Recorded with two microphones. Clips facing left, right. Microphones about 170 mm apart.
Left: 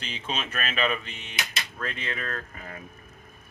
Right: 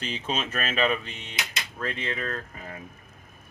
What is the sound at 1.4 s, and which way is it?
Speech, 20° right (ahead or behind).